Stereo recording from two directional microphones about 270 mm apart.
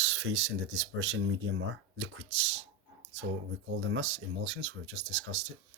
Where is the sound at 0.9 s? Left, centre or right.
Right.